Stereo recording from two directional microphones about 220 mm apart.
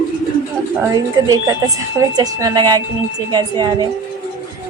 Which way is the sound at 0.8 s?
15° right (ahead or behind).